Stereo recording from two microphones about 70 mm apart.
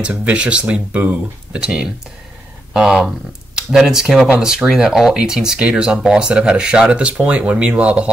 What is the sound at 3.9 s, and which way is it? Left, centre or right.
Speech, centre.